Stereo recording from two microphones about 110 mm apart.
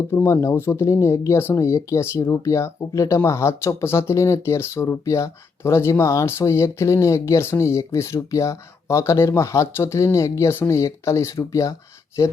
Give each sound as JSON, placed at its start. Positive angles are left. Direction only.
{"t": 0.1, "sound": "speech", "side_deg": 25}